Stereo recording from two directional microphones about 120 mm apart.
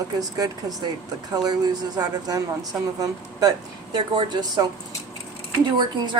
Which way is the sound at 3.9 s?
35° right (ahead or behind).